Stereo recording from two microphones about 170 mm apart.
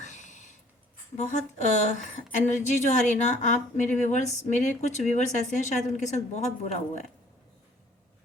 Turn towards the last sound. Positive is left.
turn(degrees=45)  # may be behind; listen again after turning